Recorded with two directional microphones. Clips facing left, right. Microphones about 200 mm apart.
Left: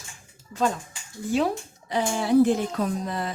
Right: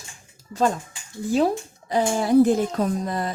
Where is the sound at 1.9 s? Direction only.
40° right (ahead or behind).